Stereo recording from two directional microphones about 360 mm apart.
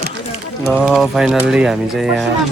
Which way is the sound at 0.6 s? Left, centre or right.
Centre.